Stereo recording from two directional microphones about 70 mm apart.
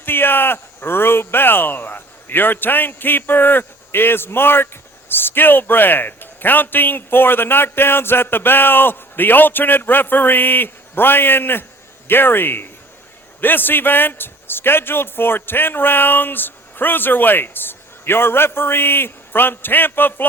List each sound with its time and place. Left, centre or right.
0.0 s speech: left